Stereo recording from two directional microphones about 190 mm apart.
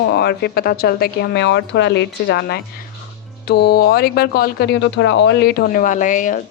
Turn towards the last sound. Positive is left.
turn(degrees=40)  # may be behind; listen again after turning